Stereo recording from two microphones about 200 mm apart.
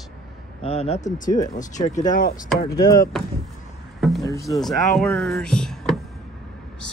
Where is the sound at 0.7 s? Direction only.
30° left (ahead or behind).